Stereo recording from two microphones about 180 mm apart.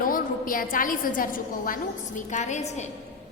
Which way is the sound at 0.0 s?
50° left (ahead or behind).